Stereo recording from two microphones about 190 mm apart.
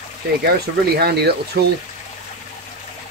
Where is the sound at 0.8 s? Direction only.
60° right (ahead or behind).